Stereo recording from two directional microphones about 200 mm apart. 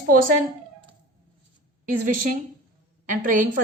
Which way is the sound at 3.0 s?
40° right (ahead or behind).